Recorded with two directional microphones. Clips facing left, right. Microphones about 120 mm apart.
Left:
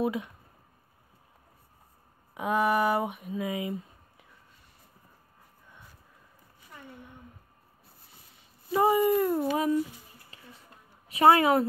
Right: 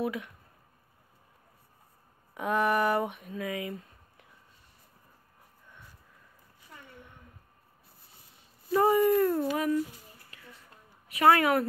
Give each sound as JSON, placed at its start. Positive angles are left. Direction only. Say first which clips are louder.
{"t": 0.0, "sound": "speech", "louder": "left 3 dB", "side_deg": 25}
{"t": 2.3, "sound": "a sound", "louder": "left 1 dB", "side_deg": 10}
{"t": 3.3, "sound": "speech", "louder": "left 3 dB", "side_deg": 20}
{"t": 8.7, "sound": "speech", "louder": "even", "side_deg": 10}
{"t": 10.3, "sound": "a sound", "louder": "left 1 dB", "side_deg": 25}
{"t": 11.1, "sound": "a woman's voice", "louder": "left 2 dB", "side_deg": 25}